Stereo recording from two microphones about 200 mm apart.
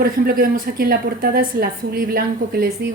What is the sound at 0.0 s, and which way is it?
Speech, 50° right (ahead or behind).